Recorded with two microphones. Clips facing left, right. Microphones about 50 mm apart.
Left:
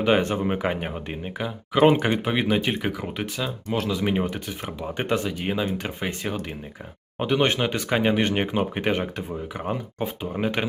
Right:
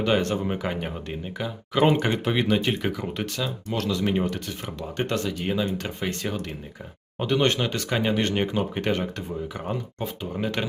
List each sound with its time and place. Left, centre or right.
0.0 s speech: centre